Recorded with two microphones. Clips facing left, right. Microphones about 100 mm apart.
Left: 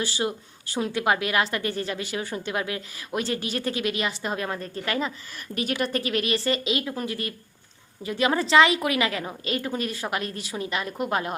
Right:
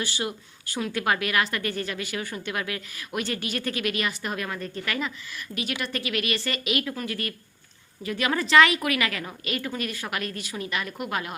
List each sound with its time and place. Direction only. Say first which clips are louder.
0.0 s a woman's voice: left 3 dB; 30° left (ahead or behind)